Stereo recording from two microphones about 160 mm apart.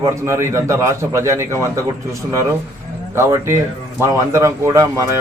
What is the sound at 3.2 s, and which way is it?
Speech, 15° right (ahead or behind).